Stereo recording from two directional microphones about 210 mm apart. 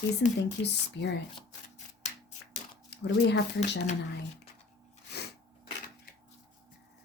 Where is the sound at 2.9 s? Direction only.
55° left (ahead or behind).